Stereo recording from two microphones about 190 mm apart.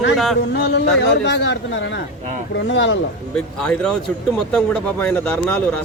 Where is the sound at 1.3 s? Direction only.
70° left (ahead or behind).